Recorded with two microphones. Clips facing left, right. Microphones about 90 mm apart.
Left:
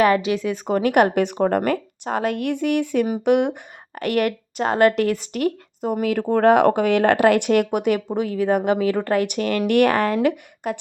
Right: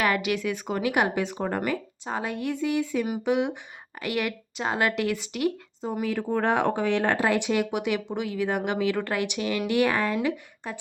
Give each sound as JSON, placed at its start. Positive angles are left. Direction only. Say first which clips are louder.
{"t": 0.0, "sound": "speech", "louder": "left 7 dB", "side_deg": 30}
{"t": 5.8, "sound": "speech", "louder": "left 7 dB", "side_deg": 70}